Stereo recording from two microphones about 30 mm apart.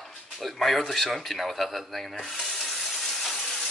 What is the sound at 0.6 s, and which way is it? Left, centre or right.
Speech, centre.